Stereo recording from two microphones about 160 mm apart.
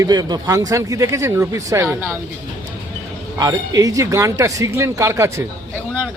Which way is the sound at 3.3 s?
25° right (ahead or behind).